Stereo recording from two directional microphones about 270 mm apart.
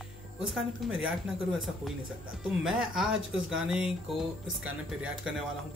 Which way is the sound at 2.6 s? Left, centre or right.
Centre.